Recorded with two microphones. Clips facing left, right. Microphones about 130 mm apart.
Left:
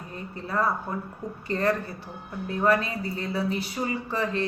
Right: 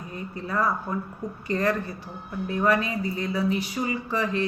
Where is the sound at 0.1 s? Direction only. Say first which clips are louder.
Right 1 dB; 30° left (ahead or behind).